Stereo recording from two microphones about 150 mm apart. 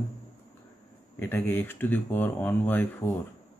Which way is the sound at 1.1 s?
15° left (ahead or behind).